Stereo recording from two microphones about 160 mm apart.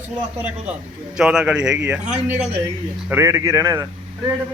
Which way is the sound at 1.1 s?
5° right (ahead or behind).